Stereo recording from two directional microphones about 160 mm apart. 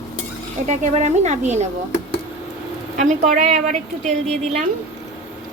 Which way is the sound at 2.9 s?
50° right (ahead or behind).